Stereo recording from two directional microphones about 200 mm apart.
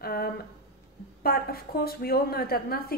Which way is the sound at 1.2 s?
50° left (ahead or behind).